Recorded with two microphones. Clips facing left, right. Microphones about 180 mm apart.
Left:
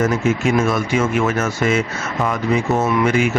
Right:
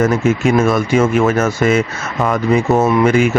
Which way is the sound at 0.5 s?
45° right (ahead or behind).